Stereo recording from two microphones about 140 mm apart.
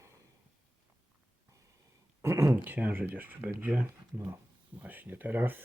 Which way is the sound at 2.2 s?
20° right (ahead or behind).